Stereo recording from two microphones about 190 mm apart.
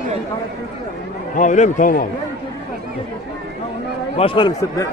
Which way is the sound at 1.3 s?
40° left (ahead or behind).